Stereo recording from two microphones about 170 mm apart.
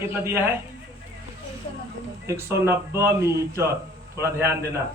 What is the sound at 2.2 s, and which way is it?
Speech, 15° right (ahead or behind).